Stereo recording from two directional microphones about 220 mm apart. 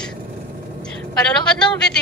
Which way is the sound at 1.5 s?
5° left (ahead or behind).